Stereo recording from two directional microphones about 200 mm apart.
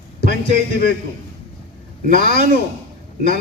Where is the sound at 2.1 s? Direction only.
50° left (ahead or behind).